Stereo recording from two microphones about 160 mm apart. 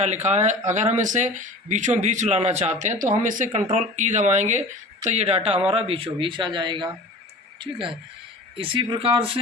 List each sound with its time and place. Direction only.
0.0 s speech: 45° right (ahead or behind)